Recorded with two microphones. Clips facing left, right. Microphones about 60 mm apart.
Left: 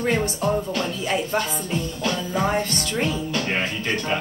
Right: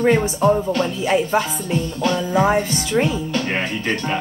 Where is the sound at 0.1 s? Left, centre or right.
Centre.